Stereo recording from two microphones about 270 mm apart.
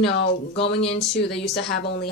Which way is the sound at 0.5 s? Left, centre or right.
Left.